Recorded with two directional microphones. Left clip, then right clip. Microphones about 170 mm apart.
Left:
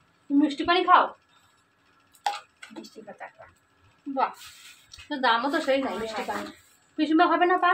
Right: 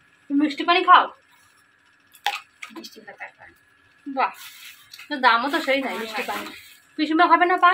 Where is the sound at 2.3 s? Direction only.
30° left (ahead or behind).